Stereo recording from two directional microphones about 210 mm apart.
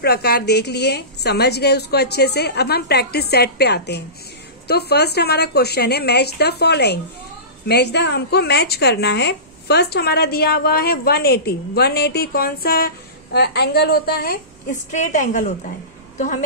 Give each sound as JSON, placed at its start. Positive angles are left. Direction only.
{"t": 0.0, "sound": "a woman's voice", "side_deg": 50}